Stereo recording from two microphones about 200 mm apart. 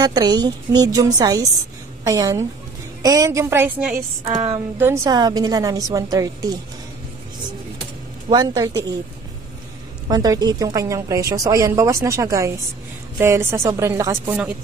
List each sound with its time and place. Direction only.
0.0 s a woman's voice: 20° right (ahead or behind)
8.3 s a woman's voice: 20° right (ahead or behind)
10.0 s a woman's voice: 20° right (ahead or behind)